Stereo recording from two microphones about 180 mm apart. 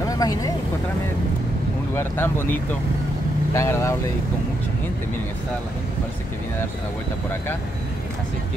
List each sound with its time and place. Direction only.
0.2 s speech: 20° left (ahead or behind)
2.0 s speech: 15° left (ahead or behind)